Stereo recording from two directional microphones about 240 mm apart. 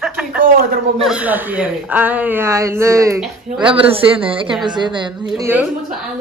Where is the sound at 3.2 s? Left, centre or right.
Centre.